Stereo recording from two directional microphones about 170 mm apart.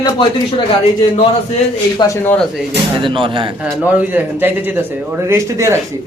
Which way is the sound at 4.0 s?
10° right (ahead or behind).